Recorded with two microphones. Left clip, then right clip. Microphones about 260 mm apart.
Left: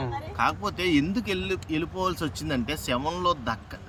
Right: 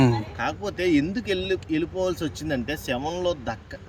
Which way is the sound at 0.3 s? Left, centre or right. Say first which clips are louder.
Left 2 dB; centre.